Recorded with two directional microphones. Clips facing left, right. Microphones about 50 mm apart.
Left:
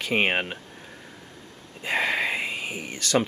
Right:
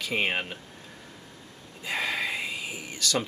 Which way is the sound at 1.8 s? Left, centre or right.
Left.